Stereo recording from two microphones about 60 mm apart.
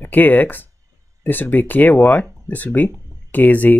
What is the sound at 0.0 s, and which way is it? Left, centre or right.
Speech, left.